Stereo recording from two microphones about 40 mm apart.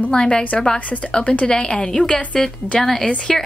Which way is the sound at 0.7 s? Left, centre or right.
Left.